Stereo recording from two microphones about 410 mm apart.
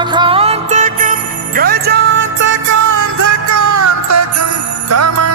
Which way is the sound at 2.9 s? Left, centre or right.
Right.